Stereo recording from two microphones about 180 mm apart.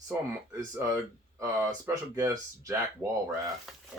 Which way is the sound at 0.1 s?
20° right (ahead or behind).